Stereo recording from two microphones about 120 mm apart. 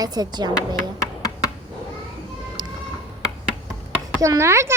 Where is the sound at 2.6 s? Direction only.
35° right (ahead or behind).